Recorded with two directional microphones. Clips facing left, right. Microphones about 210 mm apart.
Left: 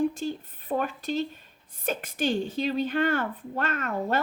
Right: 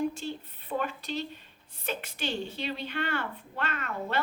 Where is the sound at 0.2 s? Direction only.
45° left (ahead or behind).